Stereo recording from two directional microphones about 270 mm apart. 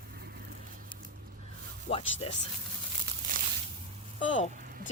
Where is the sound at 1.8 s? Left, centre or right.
Left.